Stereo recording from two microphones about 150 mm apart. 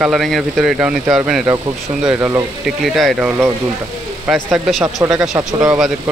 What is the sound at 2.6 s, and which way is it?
Speech, centre (ahead or behind).